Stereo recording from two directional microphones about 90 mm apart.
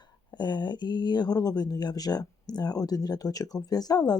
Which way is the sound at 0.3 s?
55° left (ahead or behind).